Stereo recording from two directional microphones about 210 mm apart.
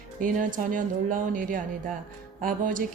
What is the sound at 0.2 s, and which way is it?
Speech, 40° right (ahead or behind).